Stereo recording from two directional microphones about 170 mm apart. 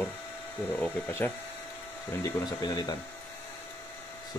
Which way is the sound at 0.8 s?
10° left (ahead or behind).